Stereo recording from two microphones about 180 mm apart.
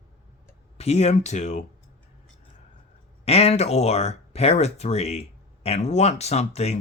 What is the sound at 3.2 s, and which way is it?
Speech, 35° left (ahead or behind).